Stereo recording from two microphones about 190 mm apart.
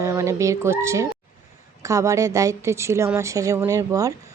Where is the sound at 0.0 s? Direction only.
15° right (ahead or behind).